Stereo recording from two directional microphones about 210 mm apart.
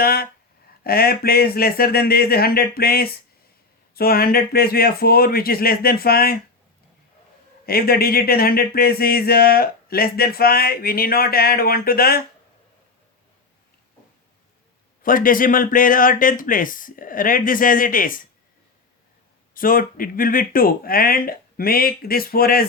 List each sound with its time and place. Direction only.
0.0 s speech: 45° left (ahead or behind)
7.6 s speech: 45° left (ahead or behind)
15.0 s speech: 40° left (ahead or behind)
19.5 s speech: 40° left (ahead or behind)